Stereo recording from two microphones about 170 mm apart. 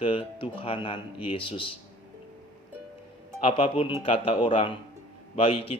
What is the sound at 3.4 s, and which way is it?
A man's voice, 35° left (ahead or behind).